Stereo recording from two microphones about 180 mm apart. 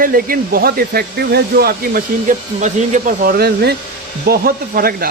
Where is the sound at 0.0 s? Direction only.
55° right (ahead or behind).